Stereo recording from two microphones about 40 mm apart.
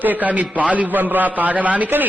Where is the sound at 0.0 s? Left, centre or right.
Right.